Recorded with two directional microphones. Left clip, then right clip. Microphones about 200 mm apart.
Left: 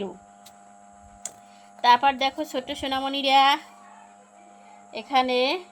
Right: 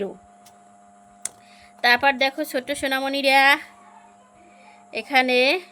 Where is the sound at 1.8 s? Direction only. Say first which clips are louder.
Right 1 dB; 30° right (ahead or behind).